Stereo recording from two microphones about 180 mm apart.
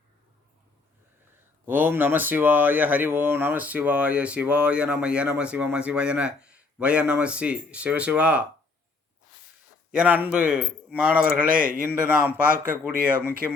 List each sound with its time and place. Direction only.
1.6 s speech: 10° right (ahead or behind)
9.9 s speech: 5° right (ahead or behind)
11.4 s a man's voice: 50° right (ahead or behind)
11.9 s speech: 10° right (ahead or behind)